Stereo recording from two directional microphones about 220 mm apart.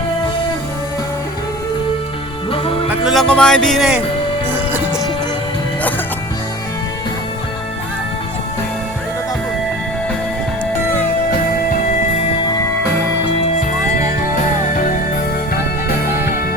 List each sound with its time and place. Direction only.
2.5 s music: 25° left (ahead or behind)
2.9 s speech: centre (ahead or behind)
11.3 s music: 40° left (ahead or behind)
13.5 s music: 35° left (ahead or behind)